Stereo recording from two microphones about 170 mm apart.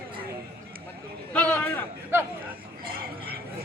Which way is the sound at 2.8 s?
60° right (ahead or behind).